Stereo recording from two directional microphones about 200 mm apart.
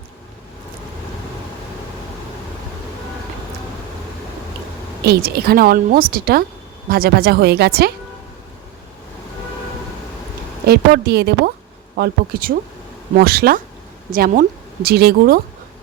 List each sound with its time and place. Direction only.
5.0 s speech: 50° right (ahead or behind)
10.7 s speech: 55° right (ahead or behind)